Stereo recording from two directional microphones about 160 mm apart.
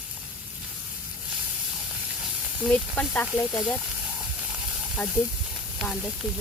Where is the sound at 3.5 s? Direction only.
Centre (ahead or behind).